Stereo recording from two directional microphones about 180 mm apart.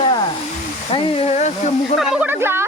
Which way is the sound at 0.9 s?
30° left (ahead or behind).